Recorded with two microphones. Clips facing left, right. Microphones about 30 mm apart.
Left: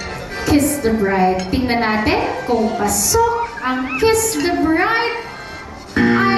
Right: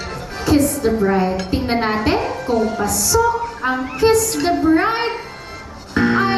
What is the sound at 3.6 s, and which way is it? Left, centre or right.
Speech, left.